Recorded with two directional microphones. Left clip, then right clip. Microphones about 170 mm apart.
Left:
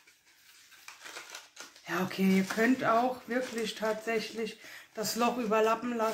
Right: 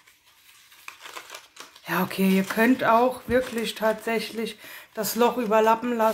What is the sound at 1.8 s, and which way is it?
Speech, 45° right (ahead or behind).